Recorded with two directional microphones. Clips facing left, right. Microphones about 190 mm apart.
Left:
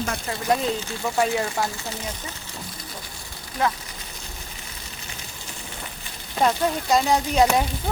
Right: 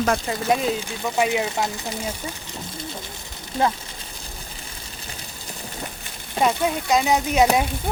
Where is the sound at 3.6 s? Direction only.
25° right (ahead or behind).